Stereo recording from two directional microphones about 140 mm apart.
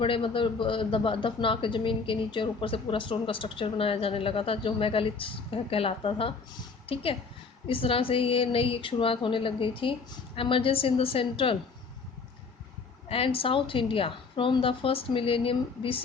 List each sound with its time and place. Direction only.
0.0 s a man's voice: 40° left (ahead or behind)
13.1 s a man's voice: 40° left (ahead or behind)